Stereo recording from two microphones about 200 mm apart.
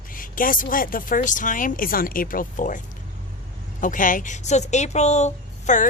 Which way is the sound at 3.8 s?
40° left (ahead or behind).